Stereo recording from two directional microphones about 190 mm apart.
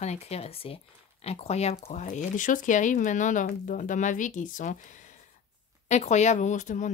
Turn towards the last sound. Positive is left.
turn(degrees=40)  # may be behind; listen again after turning